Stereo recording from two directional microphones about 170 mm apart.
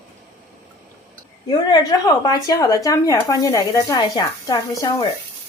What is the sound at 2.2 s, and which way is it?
Speech, 20° left (ahead or behind).